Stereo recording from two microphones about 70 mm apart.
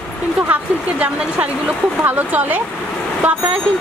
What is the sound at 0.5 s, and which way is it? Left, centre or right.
A woman's voice, right.